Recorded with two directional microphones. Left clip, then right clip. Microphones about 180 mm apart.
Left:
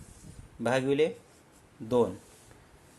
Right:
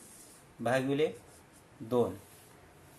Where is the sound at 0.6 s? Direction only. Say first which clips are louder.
Left 3 dB; 55° left (ahead or behind).